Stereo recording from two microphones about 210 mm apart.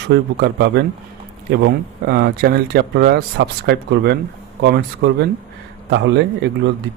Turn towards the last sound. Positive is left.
turn(degrees=-55)  # may be behind; listen again after turning